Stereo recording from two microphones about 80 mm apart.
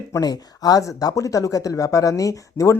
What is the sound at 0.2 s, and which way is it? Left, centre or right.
Speech, left.